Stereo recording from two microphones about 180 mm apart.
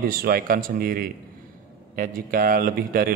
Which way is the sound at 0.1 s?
55° right (ahead or behind).